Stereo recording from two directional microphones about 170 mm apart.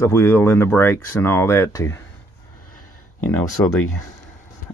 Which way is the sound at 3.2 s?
10° left (ahead or behind).